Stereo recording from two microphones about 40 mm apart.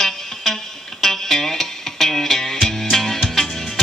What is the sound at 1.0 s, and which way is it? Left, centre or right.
Music, centre.